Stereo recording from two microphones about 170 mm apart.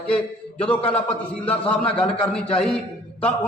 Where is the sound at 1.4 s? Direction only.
10° left (ahead or behind).